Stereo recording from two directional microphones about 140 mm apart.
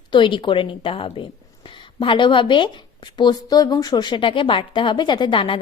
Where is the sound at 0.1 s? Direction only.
35° left (ahead or behind).